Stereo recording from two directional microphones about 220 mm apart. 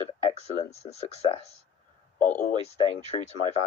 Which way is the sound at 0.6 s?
30° left (ahead or behind).